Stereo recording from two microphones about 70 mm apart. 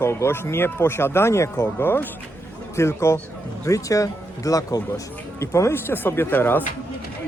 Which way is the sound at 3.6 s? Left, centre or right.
Left.